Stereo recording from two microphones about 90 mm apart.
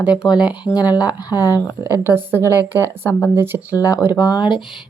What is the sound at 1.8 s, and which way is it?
Speech, 25° right (ahead or behind).